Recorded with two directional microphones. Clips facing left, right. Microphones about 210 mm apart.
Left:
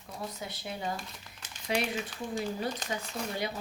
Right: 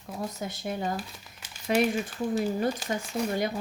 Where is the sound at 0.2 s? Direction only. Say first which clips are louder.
Right 5 dB; 45° right (ahead or behind).